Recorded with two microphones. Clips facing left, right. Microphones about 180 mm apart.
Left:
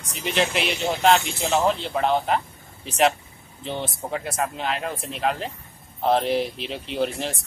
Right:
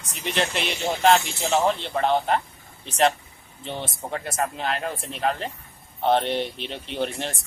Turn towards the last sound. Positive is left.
turn(degrees=0)  # may be behind; listen again after turning